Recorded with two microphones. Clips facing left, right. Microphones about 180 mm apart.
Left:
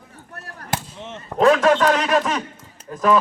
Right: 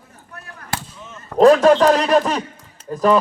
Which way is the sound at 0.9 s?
80° left.